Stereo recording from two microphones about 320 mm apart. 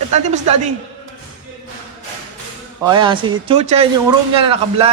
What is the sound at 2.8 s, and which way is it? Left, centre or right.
Speech, centre.